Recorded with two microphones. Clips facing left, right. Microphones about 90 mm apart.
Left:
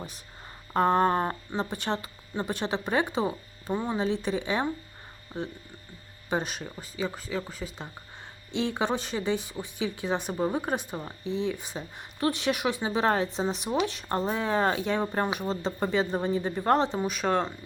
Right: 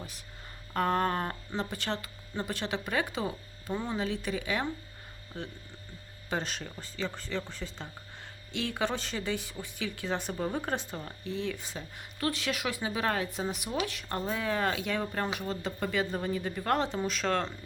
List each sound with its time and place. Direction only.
0.7 s speech: 25° left (ahead or behind); by 7.9 s 10° left (ahead or behind)
8.5 s speech: 20° left (ahead or behind)